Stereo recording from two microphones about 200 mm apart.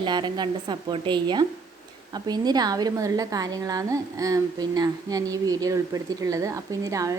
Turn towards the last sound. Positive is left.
turn(degrees=-15)  # may be behind; listen again after turning